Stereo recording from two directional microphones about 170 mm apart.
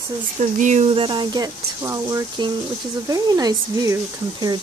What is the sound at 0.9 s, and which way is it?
Speech, 30° right (ahead or behind).